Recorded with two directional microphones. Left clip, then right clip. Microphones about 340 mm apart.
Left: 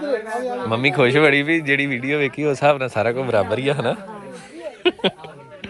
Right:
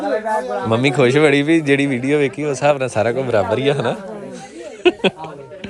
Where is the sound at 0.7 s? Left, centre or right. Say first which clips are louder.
Right 2 dB; centre.